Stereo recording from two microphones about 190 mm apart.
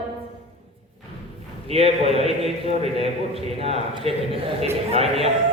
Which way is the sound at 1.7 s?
30° right (ahead or behind).